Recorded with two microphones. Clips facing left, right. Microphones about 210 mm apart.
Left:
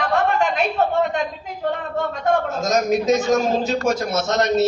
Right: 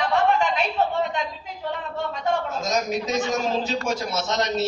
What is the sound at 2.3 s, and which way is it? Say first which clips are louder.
A man's voice: left 5 dB; 50° left (ahead or behind).